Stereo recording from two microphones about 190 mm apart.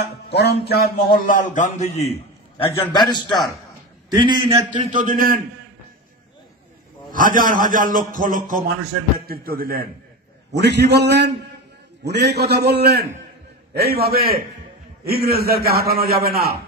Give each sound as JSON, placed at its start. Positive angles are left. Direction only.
{"t": 0.0, "sound": "music", "side_deg": 60}
{"t": 2.7, "sound": "a man's voice", "side_deg": 20}
{"t": 4.1, "sound": "a man's voice", "side_deg": -25}
{"t": 7.1, "sound": "a man's voice", "side_deg": -45}
{"t": 10.5, "sound": "a man's voice", "side_deg": -65}